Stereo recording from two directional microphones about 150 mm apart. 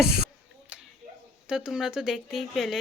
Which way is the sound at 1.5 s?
5° right (ahead or behind).